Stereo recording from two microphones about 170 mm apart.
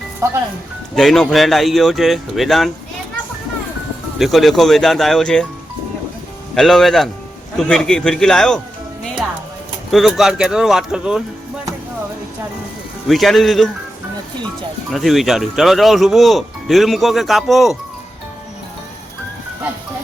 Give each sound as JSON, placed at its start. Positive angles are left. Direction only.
{"t": 0.2, "sound": "speech", "side_deg": -20}
{"t": 0.9, "sound": "speech", "side_deg": 0}
{"t": 4.2, "sound": "speech", "side_deg": 0}
{"t": 6.5, "sound": "speech", "side_deg": 0}
{"t": 9.9, "sound": "speech", "side_deg": 0}
{"t": 13.1, "sound": "speech", "side_deg": 0}
{"t": 14.8, "sound": "speech", "side_deg": 0}